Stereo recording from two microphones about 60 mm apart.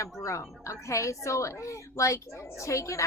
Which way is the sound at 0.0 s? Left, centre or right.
Left.